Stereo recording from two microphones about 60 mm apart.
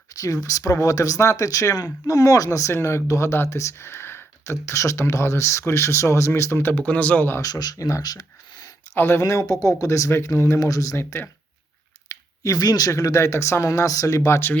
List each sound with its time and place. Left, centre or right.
0.1 s speech: left
2.8 s speech: left
7.4 s speech: left
9.0 s speech: left
9.2 s speech: left
9.8 s speech: left
10.1 s speech: left
11.1 s speech: left
12.0 s a sound: left
12.9 s speech: left
14.3 s speech: left